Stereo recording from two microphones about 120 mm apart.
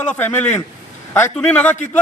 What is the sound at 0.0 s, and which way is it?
A man's voice, 10° left (ahead or behind).